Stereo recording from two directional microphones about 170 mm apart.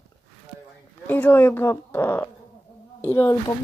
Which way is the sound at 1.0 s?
10° left (ahead or behind).